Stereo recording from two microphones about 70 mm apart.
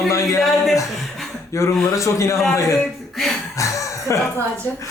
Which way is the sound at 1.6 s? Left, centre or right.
Left.